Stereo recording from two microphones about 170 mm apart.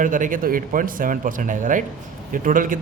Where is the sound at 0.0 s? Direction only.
50° right (ahead or behind).